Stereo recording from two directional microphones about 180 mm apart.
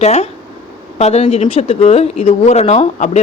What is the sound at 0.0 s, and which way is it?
Speech, 35° left (ahead or behind).